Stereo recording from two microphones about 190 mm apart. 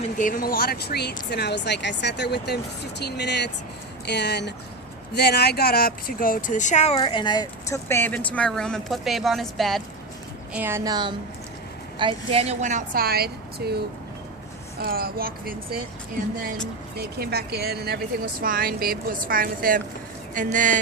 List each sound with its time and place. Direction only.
0.2 s speech: 45° left (ahead or behind); by 9.8 s centre (ahead or behind)
10.5 s a woman's voice: 10° right (ahead or behind); by 13.7 s 55° right (ahead or behind)
14.8 s a woman's voice: 55° right (ahead or behind)
17.0 s a woman's voice: 55° right (ahead or behind)